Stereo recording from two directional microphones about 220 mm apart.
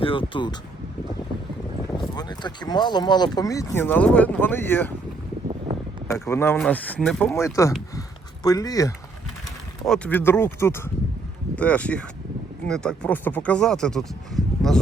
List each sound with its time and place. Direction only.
0.0 s speech: 25° left (ahead or behind)
2.1 s speech: 20° left (ahead or behind)
6.1 s speech: 10° left (ahead or behind)
7.3 s speech: 15° left (ahead or behind)
9.8 s speech: 5° left (ahead or behind)